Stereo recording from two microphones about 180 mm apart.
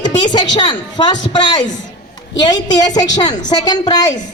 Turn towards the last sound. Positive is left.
turn(degrees=20)  # may be behind; listen again after turning